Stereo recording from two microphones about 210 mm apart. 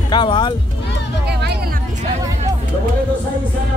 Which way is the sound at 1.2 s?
50° right (ahead or behind).